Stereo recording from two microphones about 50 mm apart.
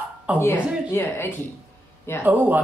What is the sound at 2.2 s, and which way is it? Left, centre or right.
Speech, right.